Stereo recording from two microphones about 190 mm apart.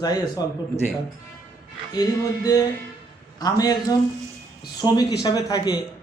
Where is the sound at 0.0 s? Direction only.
20° left (ahead or behind).